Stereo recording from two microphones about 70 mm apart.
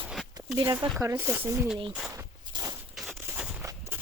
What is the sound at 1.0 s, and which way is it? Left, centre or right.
Speech, right.